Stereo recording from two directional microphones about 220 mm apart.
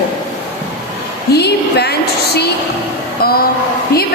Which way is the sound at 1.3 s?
50° left (ahead or behind).